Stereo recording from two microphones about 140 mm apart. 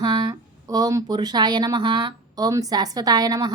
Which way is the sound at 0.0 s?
30° right (ahead or behind).